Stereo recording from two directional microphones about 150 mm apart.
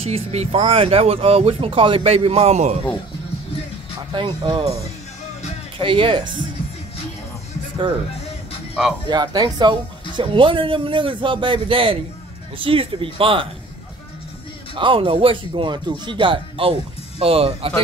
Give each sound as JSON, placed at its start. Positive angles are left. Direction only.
{"t": 0.0, "sound": "speech", "side_deg": -45}
{"t": 4.1, "sound": "speech", "side_deg": -35}
{"t": 5.8, "sound": "speech", "side_deg": -35}
{"t": 9.1, "sound": "speech", "side_deg": -30}
{"t": 14.8, "sound": "speech", "side_deg": -35}